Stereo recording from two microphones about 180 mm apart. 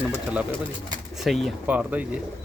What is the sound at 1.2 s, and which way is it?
Speech, centre (ahead or behind).